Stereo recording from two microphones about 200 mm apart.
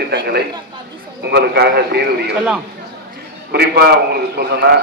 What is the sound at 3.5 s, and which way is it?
A man's voice, 55° right (ahead or behind).